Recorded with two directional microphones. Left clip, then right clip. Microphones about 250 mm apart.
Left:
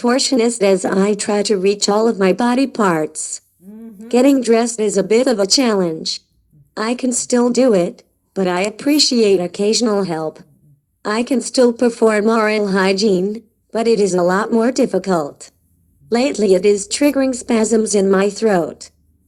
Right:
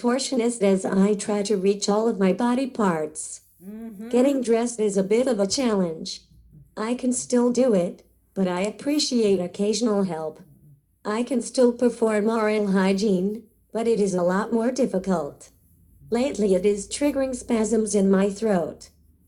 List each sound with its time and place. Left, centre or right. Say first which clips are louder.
0.0 s speech: left 8 dB; left
3.7 s a woman's voice: left 1 dB; centre
4.1 s speech: left 8 dB; left